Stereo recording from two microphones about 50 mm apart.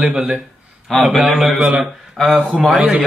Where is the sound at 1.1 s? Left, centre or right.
Centre.